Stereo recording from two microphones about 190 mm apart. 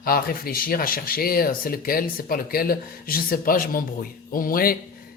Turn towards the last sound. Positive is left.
turn(degrees=50)  # may be behind; listen again after turning